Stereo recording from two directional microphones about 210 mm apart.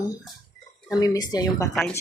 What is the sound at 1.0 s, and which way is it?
Speech, 15° left (ahead or behind).